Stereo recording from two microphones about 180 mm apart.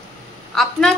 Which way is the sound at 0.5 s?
Centre (ahead or behind).